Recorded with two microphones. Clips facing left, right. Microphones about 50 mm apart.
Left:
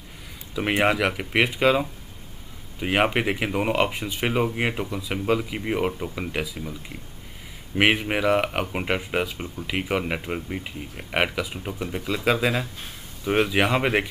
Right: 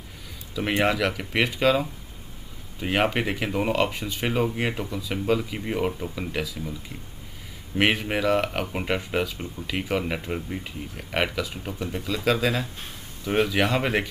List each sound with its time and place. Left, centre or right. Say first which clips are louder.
0.6 s speech: left 2 dB; centre
7.7 s speech: left 2 dB; centre